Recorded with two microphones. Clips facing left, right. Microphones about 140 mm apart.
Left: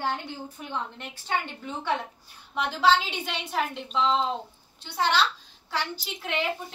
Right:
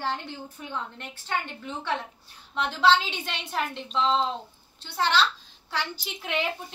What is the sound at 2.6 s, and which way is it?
A child's voice, 5° left (ahead or behind).